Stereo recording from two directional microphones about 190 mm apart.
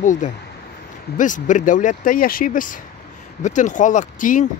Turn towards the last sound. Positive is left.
turn(degrees=40)  # may be behind; listen again after turning